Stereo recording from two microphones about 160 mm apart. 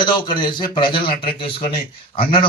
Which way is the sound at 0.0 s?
30° left (ahead or behind).